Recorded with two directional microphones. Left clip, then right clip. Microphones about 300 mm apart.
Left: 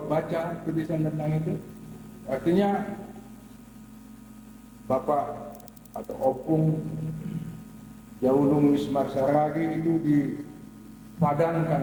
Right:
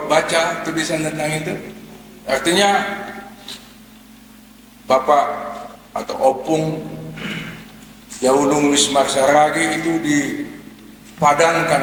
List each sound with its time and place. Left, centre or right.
0.0 s a man's voice: centre
4.9 s a man's voice: centre
8.2 s a man's voice: centre
10.0 s a man's voice: right
11.2 s a man's voice: centre